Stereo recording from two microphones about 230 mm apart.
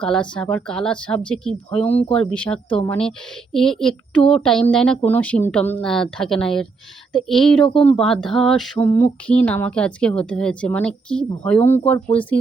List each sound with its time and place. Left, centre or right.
0.0 s speech: centre
7.7 s speech: left
7.9 s speech: centre